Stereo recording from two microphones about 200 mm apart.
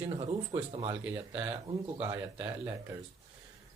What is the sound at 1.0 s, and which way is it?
A man's voice, 5° right (ahead or behind).